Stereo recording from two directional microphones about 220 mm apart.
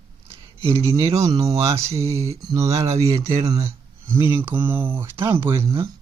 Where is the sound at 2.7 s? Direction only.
30° right (ahead or behind).